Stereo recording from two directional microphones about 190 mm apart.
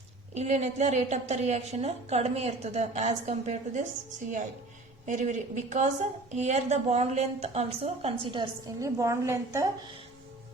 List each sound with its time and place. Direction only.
0.3 s a woman's voice: 35° right (ahead or behind)
5.0 s a woman's voice: 40° right (ahead or behind); by 9.9 s 15° right (ahead or behind)